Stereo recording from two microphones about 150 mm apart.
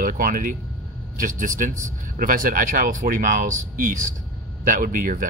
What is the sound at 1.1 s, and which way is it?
Speech, 60° right (ahead or behind).